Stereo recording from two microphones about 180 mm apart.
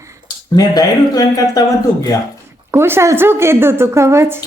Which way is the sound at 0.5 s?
20° left (ahead or behind).